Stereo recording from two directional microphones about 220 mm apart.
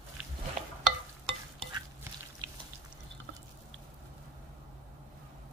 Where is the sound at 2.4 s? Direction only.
20° right (ahead or behind).